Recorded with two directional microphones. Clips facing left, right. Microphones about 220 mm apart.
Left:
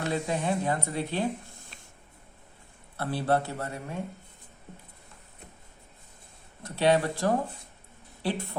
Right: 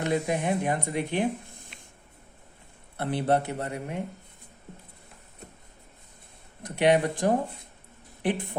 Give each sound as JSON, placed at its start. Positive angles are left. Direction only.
{"t": 0.0, "sound": "speech", "side_deg": -15}
{"t": 3.0, "sound": "speech", "side_deg": -20}
{"t": 6.6, "sound": "speech", "side_deg": -15}